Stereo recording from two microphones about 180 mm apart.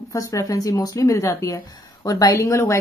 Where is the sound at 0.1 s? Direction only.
20° left (ahead or behind).